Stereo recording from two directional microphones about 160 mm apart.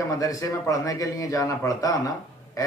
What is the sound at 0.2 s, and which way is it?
A man's voice, 20° left (ahead or behind).